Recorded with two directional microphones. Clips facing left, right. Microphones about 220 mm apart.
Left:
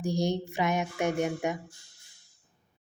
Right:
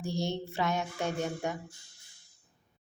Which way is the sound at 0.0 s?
15° left (ahead or behind).